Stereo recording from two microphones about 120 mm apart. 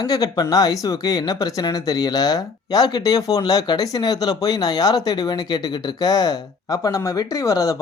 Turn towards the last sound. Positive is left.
turn(degrees=30)  # may be behind; listen again after turning